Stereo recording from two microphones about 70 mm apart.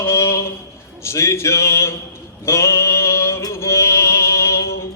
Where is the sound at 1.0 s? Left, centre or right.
Left.